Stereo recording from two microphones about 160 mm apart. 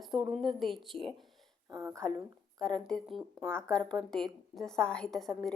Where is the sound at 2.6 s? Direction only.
5° left (ahead or behind).